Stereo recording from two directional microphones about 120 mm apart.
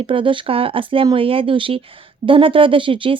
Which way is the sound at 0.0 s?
45° right (ahead or behind).